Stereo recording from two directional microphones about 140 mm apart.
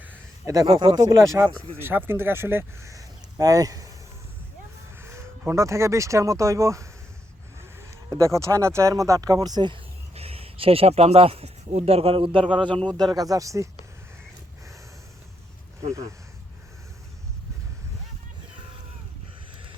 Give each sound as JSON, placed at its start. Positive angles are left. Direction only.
{"t": 0.0, "sound": "a sound", "side_deg": -10}
{"t": 0.5, "sound": "speech", "side_deg": -30}
{"t": 4.9, "sound": "a sound", "side_deg": -20}
{"t": 5.5, "sound": "speech", "side_deg": -20}
{"t": 8.1, "sound": "speech", "side_deg": -20}
{"t": 13.0, "sound": "speech", "side_deg": -25}
{"t": 15.9, "sound": "speech", "side_deg": -20}